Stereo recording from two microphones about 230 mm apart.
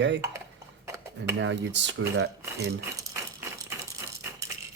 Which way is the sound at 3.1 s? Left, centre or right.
Centre.